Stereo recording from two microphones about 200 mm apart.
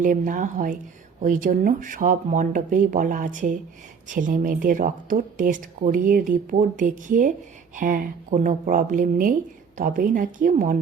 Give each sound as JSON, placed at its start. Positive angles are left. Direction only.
{"t": 0.0, "sound": "speech", "side_deg": -40}